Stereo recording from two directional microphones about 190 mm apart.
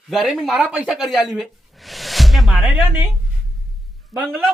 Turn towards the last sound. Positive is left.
turn(degrees=-10)  # may be behind; listen again after turning